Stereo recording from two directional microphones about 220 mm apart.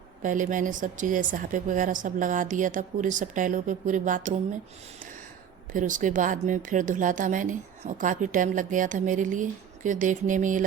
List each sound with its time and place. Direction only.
0.2 s speech: 35° right (ahead or behind)
5.7 s speech: 35° right (ahead or behind)